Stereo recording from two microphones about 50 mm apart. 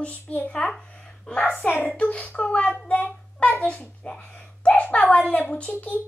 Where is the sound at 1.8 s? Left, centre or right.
Left.